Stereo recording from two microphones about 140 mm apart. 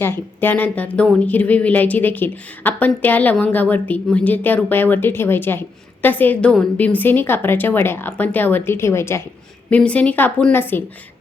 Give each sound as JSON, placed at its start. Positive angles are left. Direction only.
{"t": 0.0, "sound": "speech", "side_deg": 15}